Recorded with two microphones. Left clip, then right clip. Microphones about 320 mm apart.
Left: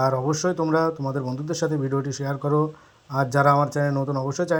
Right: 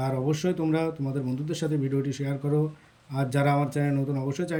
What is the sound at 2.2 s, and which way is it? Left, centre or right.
Speech, left.